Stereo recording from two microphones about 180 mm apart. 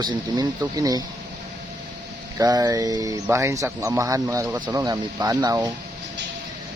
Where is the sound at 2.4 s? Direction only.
20° right (ahead or behind).